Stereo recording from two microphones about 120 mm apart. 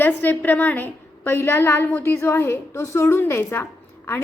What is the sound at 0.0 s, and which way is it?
A woman's voice, 15° left (ahead or behind).